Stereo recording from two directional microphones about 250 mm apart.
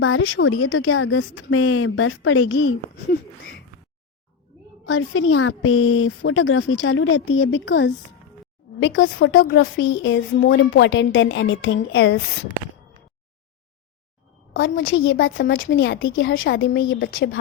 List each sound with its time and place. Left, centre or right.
0.0 s speech: left
4.9 s speech: left
14.5 s speech: left
16.9 s speech: left